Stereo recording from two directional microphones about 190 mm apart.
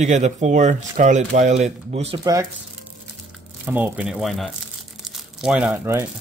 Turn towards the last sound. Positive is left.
turn(degrees=-10)  # may be behind; listen again after turning